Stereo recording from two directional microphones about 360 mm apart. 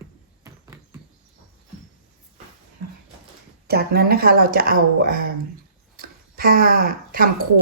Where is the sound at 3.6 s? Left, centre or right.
Right.